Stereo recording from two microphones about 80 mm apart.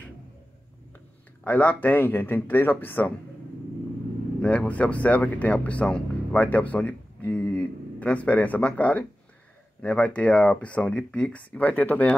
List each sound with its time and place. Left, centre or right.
1.4 s speech: left
4.4 s speech: centre